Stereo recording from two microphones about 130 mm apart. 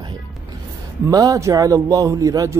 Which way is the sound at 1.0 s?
25° right (ahead or behind).